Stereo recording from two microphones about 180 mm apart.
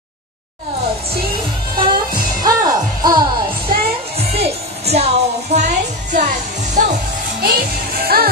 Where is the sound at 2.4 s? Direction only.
20° right (ahead or behind).